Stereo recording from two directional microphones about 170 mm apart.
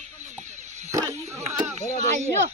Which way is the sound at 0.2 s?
45° right (ahead or behind).